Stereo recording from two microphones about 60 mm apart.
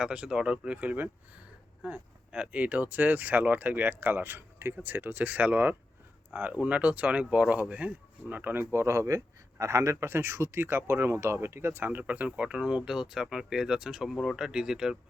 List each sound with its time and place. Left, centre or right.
0.0 s speech: centre; by 8.6 s right
8.7 s a man's voice: right
12.5 s speech: centre
14.3 s speech: centre